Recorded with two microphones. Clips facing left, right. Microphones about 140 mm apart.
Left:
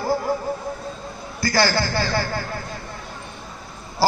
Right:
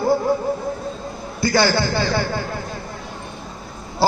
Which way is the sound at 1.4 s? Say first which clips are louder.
Right 3 dB; 25° right (ahead or behind).